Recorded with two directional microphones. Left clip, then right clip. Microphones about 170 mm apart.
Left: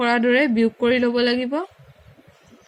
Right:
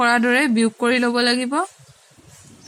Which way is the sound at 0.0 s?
50° right (ahead or behind).